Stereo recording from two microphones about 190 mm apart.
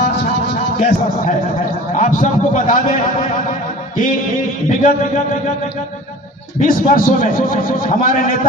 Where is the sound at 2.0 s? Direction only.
40° left (ahead or behind).